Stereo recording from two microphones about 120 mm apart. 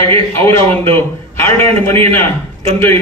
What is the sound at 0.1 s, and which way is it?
A man's voice, 20° left (ahead or behind).